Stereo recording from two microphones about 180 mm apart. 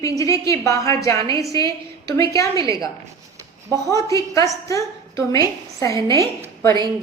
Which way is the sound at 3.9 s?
15° left (ahead or behind).